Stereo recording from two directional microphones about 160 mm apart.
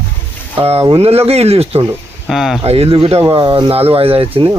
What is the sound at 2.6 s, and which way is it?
Speech, 40° right (ahead or behind).